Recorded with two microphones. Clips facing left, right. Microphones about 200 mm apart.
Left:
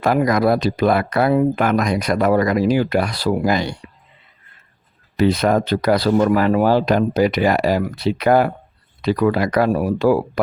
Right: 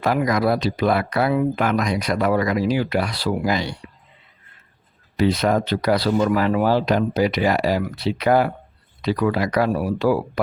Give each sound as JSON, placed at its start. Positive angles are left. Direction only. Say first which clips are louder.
{"t": 0.0, "sound": "speech", "louder": "left 3 dB", "side_deg": 50}
{"t": 5.1, "sound": "speech", "louder": "left 3 dB", "side_deg": 50}